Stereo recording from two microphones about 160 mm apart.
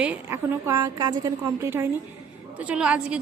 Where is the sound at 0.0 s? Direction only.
10° right (ahead or behind).